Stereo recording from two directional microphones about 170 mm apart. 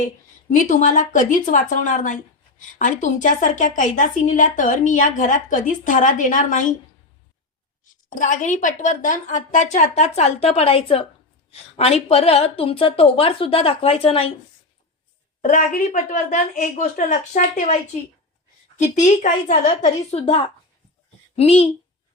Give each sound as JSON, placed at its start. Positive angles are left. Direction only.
{"t": 0.5, "sound": "a woman's voice", "side_deg": 50}
{"t": 8.1, "sound": "a woman's voice", "side_deg": 50}
{"t": 15.4, "sound": "a woman's voice", "side_deg": 50}
{"t": 18.8, "sound": "a woman's voice", "side_deg": 45}